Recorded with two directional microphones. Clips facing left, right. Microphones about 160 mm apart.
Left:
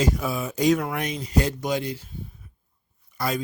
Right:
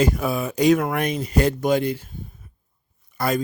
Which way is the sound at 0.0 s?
55° right (ahead or behind).